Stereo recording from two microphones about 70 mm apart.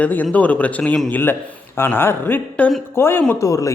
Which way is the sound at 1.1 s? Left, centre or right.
Left.